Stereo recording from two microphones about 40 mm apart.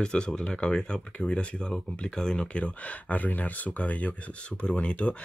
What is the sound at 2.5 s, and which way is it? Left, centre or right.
Speech, left.